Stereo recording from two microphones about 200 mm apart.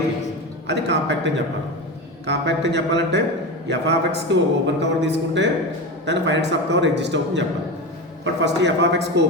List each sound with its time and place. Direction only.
0.7 s a man's voice: 60° right (ahead or behind)